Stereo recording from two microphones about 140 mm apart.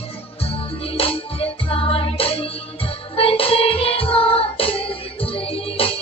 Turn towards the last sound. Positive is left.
turn(degrees=40)  # may be behind; listen again after turning